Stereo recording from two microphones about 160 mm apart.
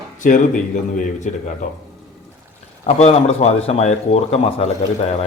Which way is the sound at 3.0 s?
40° left (ahead or behind).